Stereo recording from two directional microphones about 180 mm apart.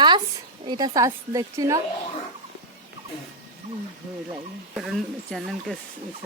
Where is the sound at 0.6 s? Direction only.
25° right (ahead or behind).